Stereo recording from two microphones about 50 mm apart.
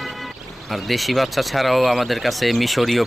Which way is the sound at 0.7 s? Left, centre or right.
Centre.